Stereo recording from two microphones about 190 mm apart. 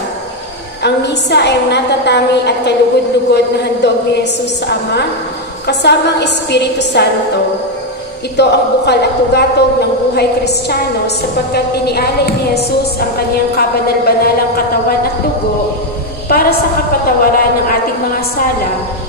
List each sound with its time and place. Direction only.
0.8 s a woman's voice: 65° left (ahead or behind)
8.4 s a woman's voice: 60° left (ahead or behind)
16.3 s a woman's voice: 50° left (ahead or behind)